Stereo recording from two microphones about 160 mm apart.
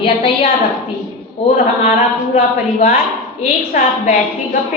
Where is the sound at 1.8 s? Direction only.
45° left (ahead or behind).